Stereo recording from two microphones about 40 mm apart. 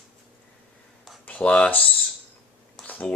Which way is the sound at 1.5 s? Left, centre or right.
Left.